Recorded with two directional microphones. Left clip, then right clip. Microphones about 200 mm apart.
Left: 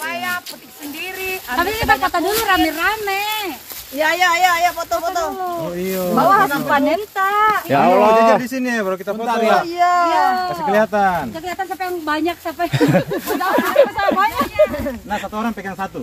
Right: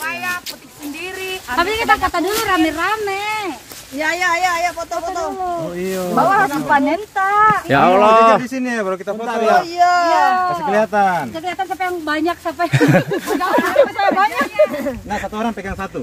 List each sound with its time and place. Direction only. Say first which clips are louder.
1.5 s speech: right 2 dB; 15° right (ahead or behind)
4.0 s speech: left 2 dB; 25° left (ahead or behind)
6.7 s speech: right 1 dB; 25° left (ahead or behind)
7.7 s speech: right 1 dB; 15° right (ahead or behind)
8.5 s speech: even; 20° left (ahead or behind)
9.8 s speech: right 1 dB; 45° right (ahead or behind)
10.4 s speech: right 1 dB; 5° right (ahead or behind)
13.4 s speech: even; 5° right (ahead or behind)
14.6 s speech: even; 20° right (ahead or behind)